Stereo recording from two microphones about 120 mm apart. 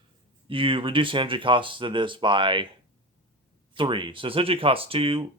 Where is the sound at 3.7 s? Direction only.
45° right (ahead or behind).